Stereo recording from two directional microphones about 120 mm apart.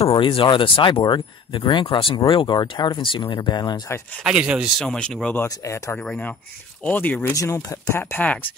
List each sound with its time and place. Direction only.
0.0 s speech: 50° left (ahead or behind)
4.2 s speech: 5° right (ahead or behind)
4.8 s speech: 10° left (ahead or behind)
6.0 s speech: 10° left (ahead or behind)
7.3 s speech: 25° left (ahead or behind)